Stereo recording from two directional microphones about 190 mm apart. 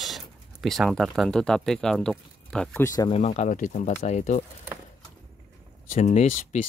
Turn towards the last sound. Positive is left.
turn(degrees=40)  # may be behind; listen again after turning